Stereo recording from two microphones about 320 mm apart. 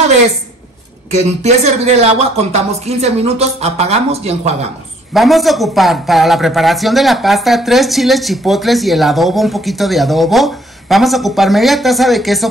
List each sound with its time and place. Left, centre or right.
1.1 s speech: right
5.1 s a man's voice: centre